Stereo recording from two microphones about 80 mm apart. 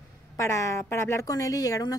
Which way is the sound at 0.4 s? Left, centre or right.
Left.